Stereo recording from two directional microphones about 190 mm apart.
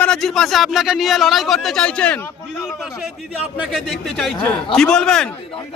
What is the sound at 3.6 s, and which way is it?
A man's voice, centre (ahead or behind).